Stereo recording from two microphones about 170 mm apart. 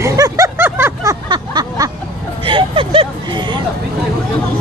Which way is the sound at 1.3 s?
25° right (ahead or behind).